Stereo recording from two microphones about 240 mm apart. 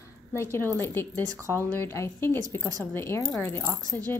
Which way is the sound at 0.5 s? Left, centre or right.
Centre.